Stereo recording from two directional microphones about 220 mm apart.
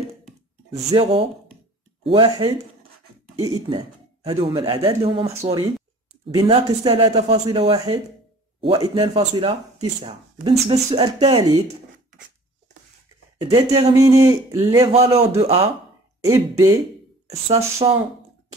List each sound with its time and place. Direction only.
0.7 s speech: 25° right (ahead or behind)
13.4 s speech: 20° right (ahead or behind)
14.9 s speech: 30° right (ahead or behind)
16.3 s speech: 15° right (ahead or behind)